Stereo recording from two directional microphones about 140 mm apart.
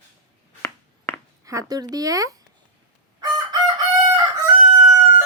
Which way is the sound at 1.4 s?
25° right (ahead or behind).